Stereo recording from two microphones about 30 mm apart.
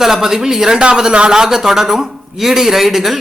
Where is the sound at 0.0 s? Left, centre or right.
Centre.